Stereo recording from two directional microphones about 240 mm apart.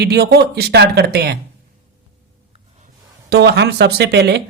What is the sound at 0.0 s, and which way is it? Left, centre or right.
Speech, right.